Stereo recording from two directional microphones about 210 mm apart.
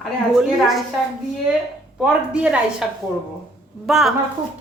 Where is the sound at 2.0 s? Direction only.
5° right (ahead or behind).